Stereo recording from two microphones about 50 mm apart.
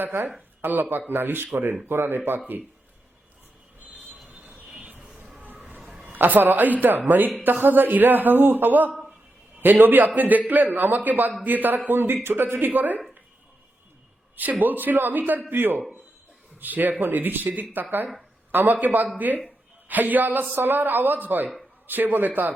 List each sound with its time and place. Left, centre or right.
0.0 s speech: right
4.3 s vehicle: right
4.7 s a sound: right
6.1 s speech: right
14.6 s speech: right